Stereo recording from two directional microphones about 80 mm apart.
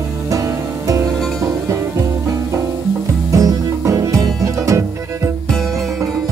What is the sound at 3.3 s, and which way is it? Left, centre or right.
Music, right.